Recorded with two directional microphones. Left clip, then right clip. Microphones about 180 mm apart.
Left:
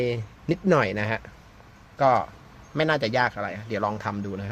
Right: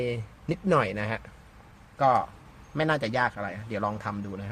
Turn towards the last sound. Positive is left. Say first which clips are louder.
# left 4 dB
turn(degrees=30)  # may be behind; listen again after turning